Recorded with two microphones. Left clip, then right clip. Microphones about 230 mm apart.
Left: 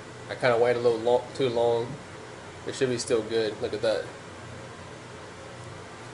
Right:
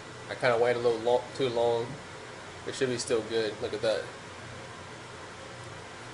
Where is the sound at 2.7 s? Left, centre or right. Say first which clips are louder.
Left 3 dB; centre.